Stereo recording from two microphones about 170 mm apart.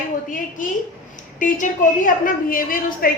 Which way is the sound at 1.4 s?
50° left (ahead or behind).